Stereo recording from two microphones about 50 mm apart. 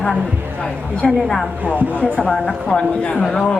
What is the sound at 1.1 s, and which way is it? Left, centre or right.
Speech, centre.